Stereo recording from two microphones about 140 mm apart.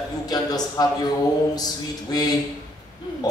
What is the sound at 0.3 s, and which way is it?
A man's voice, 30° left (ahead or behind).